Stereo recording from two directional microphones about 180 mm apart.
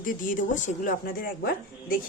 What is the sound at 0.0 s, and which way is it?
Speech, 50° left (ahead or behind).